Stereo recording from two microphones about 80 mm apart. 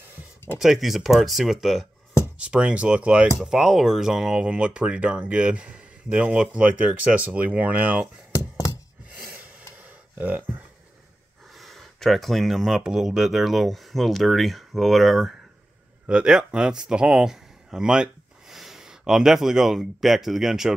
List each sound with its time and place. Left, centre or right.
0.6 s speech: centre
2.3 s speech: centre
9.3 s a sound: centre
11.5 s speech: centre
16.1 s speech: centre